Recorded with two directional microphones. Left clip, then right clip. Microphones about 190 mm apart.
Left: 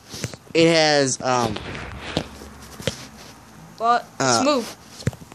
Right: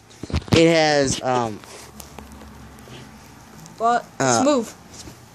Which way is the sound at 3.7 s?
35° right (ahead or behind).